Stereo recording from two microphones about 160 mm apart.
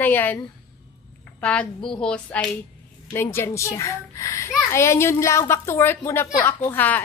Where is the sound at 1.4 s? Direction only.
5° left (ahead or behind).